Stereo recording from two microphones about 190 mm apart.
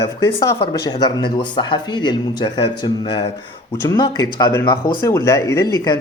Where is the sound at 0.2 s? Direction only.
20° left (ahead or behind).